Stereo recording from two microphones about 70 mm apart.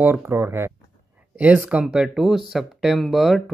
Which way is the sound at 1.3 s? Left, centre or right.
Right.